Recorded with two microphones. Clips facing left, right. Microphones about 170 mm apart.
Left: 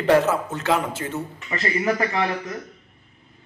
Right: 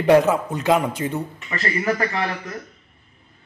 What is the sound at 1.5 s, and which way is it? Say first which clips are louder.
Speech: left 1 dB; 20° left (ahead or behind).